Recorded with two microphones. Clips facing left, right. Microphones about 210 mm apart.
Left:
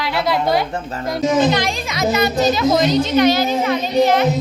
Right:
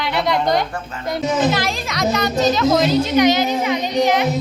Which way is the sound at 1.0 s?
Centre (ahead or behind).